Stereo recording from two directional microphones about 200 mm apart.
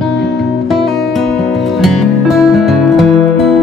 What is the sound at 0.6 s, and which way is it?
Music, centre (ahead or behind).